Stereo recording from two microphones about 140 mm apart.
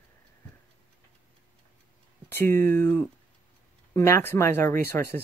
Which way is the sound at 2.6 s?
15° left (ahead or behind).